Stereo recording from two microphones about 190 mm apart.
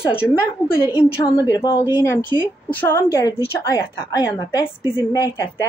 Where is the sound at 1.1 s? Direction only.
15° left (ahead or behind).